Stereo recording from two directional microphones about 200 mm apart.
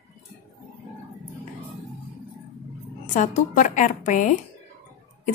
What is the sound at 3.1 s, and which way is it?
A woman's voice, 40° left (ahead or behind).